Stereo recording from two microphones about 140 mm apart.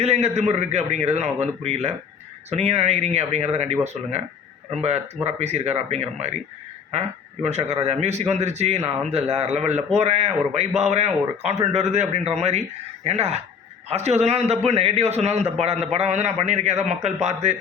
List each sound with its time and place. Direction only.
0.0 s speech: 50° right (ahead or behind)
4.8 s speech: 50° right (ahead or behind)
7.4 s speech: 50° right (ahead or behind)